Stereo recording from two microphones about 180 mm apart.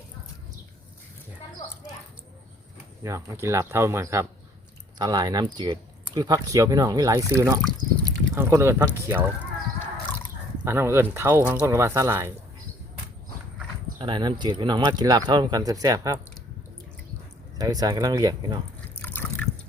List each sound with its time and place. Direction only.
3.0 s speech: 15° right (ahead or behind)
9.4 s chicken: 10° left (ahead or behind)
10.7 s speech: 15° right (ahead or behind)
14.0 s speech: 25° right (ahead or behind)
17.6 s speech: 20° right (ahead or behind)
18.9 s liquid: 10° left (ahead or behind)